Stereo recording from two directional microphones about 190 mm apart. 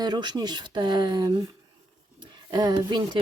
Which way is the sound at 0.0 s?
20° right (ahead or behind).